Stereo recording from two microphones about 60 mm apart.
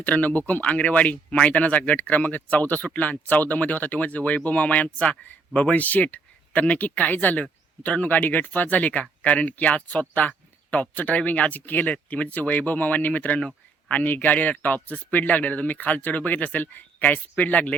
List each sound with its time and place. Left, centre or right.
0.0 s speech: left